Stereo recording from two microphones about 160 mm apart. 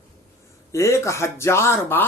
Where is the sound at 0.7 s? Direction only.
15° left (ahead or behind).